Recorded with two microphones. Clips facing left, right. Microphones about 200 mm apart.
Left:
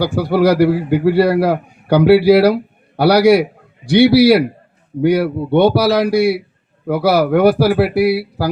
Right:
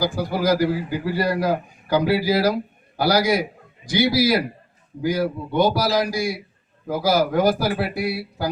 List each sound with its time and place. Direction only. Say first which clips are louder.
0.0 s a man's voice: left 8 dB; 70° left (ahead or behind)